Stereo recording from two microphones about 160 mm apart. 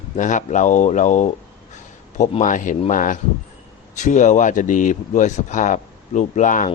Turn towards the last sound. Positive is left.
turn(degrees=50)  # may be behind; listen again after turning